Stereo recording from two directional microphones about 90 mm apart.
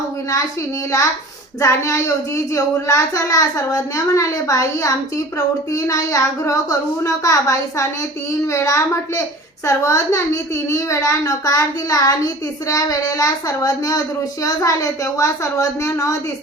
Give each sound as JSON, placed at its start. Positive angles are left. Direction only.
{"t": 1.6, "sound": "a child's voice", "side_deg": 35}